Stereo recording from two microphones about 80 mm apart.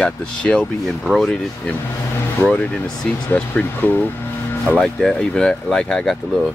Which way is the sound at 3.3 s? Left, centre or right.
Left.